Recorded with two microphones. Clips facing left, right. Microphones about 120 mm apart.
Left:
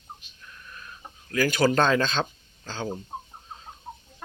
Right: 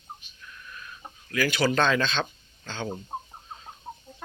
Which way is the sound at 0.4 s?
30° left (ahead or behind).